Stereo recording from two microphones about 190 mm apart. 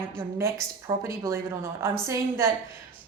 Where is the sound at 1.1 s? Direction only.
15° right (ahead or behind).